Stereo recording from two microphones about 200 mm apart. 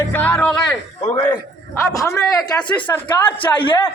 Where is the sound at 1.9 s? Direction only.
15° left (ahead or behind).